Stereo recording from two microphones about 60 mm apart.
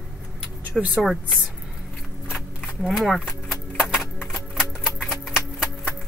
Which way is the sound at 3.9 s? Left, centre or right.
Centre.